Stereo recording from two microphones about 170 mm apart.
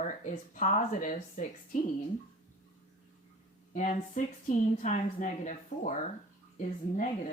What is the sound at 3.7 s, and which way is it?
Speech, 45° left (ahead or behind).